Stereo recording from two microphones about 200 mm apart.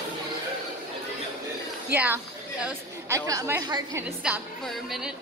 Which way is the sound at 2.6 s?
15° right (ahead or behind).